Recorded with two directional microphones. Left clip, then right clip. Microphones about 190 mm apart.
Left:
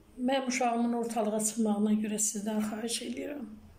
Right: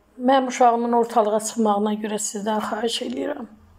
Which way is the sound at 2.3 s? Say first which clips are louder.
Right 11 dB; 45° right (ahead or behind).